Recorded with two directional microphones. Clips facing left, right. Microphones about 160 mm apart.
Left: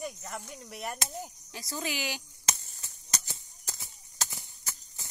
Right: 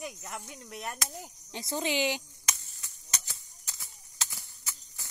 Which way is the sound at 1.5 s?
25° right (ahead or behind).